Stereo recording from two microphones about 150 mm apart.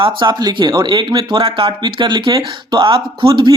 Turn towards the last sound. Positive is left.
turn(degrees=-30)  # may be behind; listen again after turning